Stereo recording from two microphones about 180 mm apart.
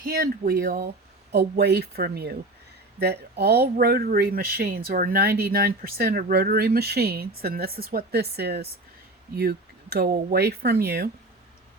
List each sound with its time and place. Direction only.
0.0 s speech: 55° right (ahead or behind)